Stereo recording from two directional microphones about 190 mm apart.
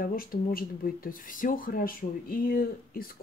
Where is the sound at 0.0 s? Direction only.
50° left (ahead or behind).